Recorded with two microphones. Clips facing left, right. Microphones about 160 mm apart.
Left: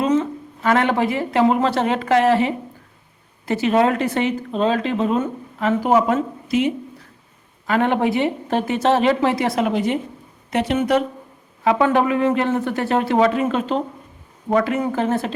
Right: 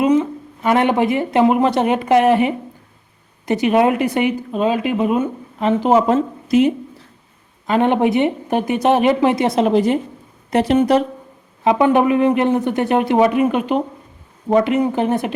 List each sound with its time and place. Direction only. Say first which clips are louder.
0.0 s speech: right 3 dB; 15° right (ahead or behind); by 6.2 s 30° right (ahead or behind)
6.5 s speech: right 6 dB; 40° right (ahead or behind)
7.7 s speech: right 3 dB; 20° right (ahead or behind); by 11.0 s 35° right (ahead or behind)
11.6 s speech: right 3 dB; 20° right (ahead or behind)